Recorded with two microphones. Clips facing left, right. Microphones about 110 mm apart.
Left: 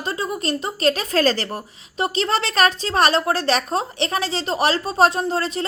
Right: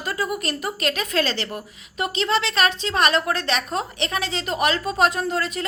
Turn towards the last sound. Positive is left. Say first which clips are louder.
# left 2 dB
turn(degrees=30)  # may be behind; listen again after turning